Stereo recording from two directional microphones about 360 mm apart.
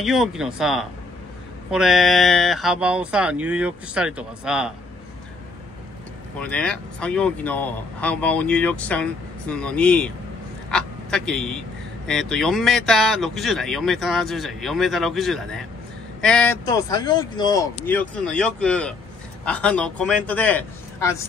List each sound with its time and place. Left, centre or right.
0.0 s speech: centre
6.4 s speech: centre